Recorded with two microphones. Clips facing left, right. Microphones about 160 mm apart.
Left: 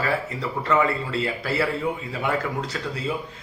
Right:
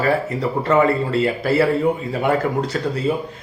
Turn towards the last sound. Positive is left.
turn(degrees=-40)  # may be behind; listen again after turning